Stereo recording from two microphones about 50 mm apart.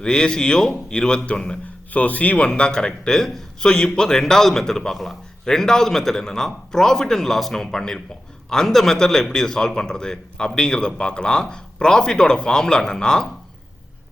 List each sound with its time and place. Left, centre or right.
0.0 s a man's voice: centre
1.6 s a man's voice: left
2.5 s a man's voice: centre
3.6 s a man's voice: centre